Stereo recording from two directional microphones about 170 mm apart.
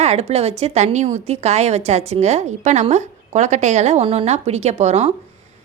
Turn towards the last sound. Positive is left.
turn(degrees=-40)  # may be behind; listen again after turning